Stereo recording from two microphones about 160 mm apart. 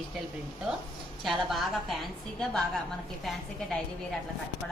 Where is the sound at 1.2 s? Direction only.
Centre (ahead or behind).